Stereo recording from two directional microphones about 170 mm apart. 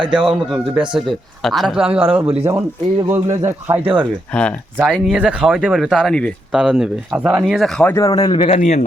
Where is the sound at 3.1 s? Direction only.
15° right (ahead or behind).